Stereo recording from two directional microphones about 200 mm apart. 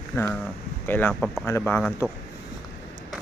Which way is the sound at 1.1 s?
Centre (ahead or behind).